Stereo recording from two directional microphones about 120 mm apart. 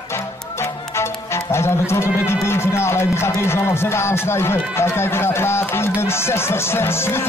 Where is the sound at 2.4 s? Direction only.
20° left (ahead or behind).